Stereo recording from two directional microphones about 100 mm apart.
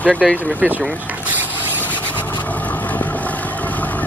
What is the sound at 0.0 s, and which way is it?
Speech, 15° left (ahead or behind).